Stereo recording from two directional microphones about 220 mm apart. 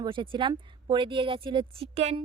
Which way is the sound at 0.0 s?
20° right (ahead or behind).